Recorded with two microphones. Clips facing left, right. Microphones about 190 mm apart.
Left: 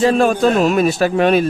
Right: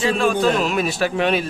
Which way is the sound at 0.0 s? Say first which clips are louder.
Left 5 dB; 45° left (ahead or behind).